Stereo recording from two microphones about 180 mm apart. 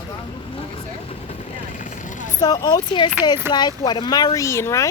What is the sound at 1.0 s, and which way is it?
Vehicle, 40° left (ahead or behind).